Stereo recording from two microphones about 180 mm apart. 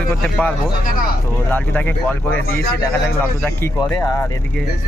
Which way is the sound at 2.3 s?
90° left.